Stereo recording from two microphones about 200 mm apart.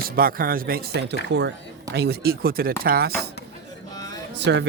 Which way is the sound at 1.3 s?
60° right (ahead or behind).